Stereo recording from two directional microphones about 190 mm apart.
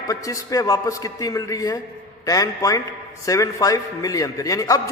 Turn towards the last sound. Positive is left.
turn(degrees=15)  # may be behind; listen again after turning